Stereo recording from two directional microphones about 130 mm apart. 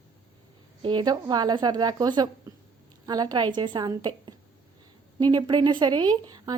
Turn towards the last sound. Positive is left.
turn(degrees=-30)  # may be behind; listen again after turning